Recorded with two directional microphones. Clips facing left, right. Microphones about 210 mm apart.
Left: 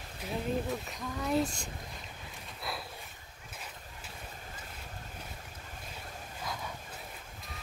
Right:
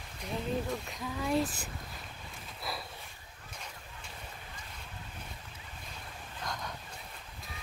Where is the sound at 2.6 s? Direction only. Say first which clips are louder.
Even; centre (ahead or behind).